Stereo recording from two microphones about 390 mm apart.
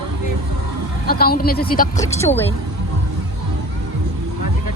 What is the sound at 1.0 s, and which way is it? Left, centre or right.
Speech, left.